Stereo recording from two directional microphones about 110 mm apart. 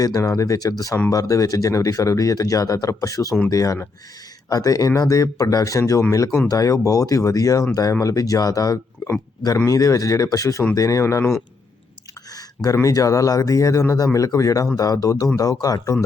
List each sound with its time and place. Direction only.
0.0 s speech: 35° left (ahead or behind)
12.6 s speech: 30° left (ahead or behind)